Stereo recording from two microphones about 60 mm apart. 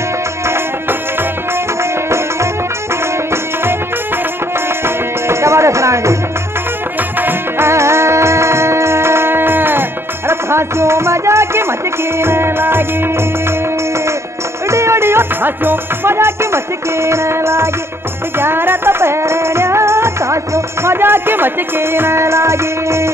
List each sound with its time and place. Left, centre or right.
1.8 s music: right
4.8 s music: right
7.2 s music: right
14.7 s music: right